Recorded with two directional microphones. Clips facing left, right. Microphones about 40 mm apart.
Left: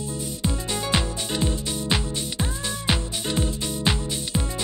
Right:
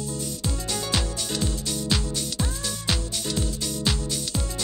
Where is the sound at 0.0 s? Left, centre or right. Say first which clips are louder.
Left 2 dB; left.